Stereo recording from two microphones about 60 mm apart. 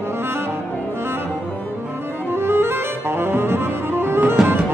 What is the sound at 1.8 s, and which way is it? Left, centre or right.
Saxophone, right.